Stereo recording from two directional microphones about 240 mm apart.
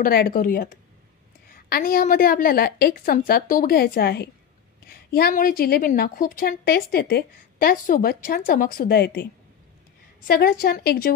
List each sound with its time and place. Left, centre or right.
0.0 s a woman's voice: left